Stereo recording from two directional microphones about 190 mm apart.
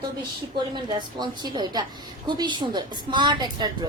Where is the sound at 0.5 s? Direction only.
25° right (ahead or behind).